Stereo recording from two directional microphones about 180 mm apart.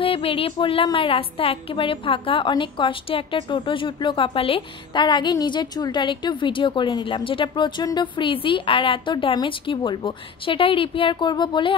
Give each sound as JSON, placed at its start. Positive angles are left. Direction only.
{"t": 0.0, "sound": "a woman's voice", "side_deg": 30}